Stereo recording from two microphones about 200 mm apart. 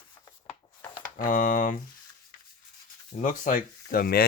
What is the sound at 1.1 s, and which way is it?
Speech, 45° left (ahead or behind).